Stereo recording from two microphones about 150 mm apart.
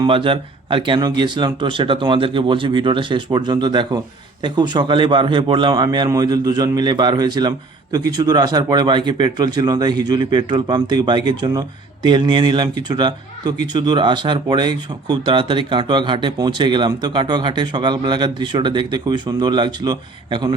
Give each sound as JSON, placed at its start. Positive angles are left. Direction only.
{"t": 0.0, "sound": "speech", "side_deg": -35}